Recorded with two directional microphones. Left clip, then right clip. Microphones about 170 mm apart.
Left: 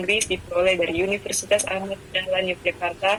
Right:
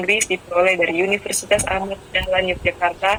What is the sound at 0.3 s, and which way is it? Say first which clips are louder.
Speech: right 4 dB; 15° right (ahead or behind).